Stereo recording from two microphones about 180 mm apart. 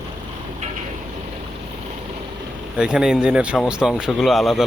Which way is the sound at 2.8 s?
5° right (ahead or behind).